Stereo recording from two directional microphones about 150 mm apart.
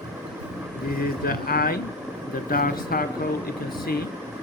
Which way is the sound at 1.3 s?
80° left.